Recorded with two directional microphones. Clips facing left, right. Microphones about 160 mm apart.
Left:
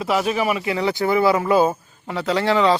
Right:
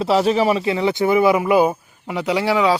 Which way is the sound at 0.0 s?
30° right (ahead or behind).